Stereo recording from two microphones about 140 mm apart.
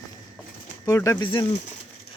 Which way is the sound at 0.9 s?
25° left (ahead or behind).